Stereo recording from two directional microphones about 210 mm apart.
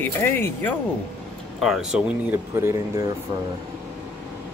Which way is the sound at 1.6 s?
Centre (ahead or behind).